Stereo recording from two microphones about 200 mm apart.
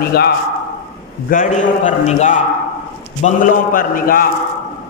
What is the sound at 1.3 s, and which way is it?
A man's voice, 40° left (ahead or behind).